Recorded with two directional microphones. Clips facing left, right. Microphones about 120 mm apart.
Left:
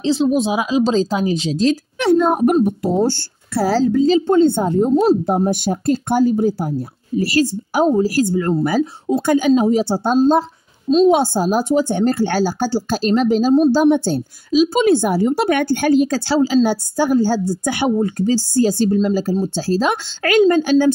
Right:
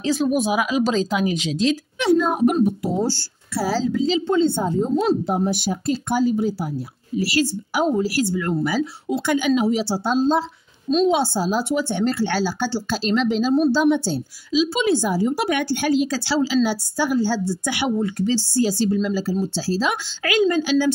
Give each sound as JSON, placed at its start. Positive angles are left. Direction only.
{"t": 0.0, "sound": "speech", "side_deg": 25}
{"t": 2.0, "sound": "a woman's voice", "side_deg": 55}
{"t": 5.2, "sound": "a woman's voice", "side_deg": 50}